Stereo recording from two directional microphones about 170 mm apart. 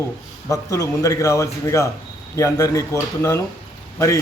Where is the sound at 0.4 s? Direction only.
20° left (ahead or behind).